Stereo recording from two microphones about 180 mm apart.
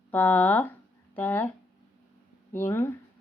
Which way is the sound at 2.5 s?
10° left (ahead or behind).